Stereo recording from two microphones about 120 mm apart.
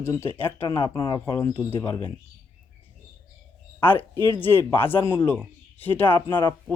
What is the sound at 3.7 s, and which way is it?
Speech, 15° left (ahead or behind).